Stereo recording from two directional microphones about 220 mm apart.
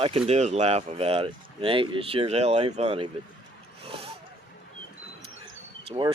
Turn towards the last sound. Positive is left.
turn(degrees=-25)  # may be behind; listen again after turning